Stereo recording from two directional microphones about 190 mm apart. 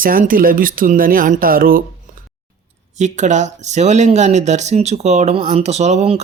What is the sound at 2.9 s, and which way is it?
Speech, 40° right (ahead or behind).